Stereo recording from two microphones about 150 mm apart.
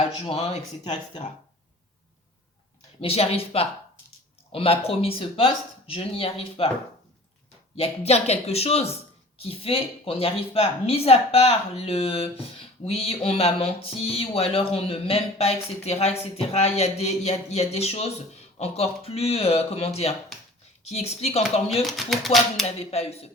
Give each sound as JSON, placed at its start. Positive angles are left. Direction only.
{"t": 0.0, "sound": "speech", "side_deg": 40}
{"t": 3.0, "sound": "a woman's voice", "side_deg": 40}
{"t": 7.8, "sound": "a woman's voice", "side_deg": 45}
{"t": 21.7, "sound": "speech", "side_deg": 0}
{"t": 22.8, "sound": "speech", "side_deg": 40}